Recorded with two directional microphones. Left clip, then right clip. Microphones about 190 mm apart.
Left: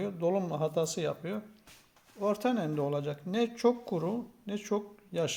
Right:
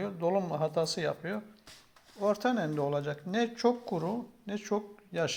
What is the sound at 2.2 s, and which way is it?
Speech, 10° left (ahead or behind).